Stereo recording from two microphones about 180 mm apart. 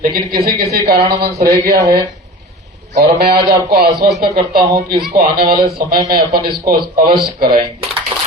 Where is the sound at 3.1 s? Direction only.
60° right (ahead or behind).